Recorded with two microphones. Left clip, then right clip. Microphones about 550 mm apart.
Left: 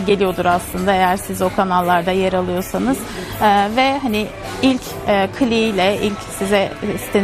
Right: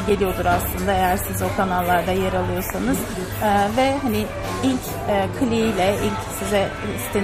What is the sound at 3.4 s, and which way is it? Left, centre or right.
Speech, left.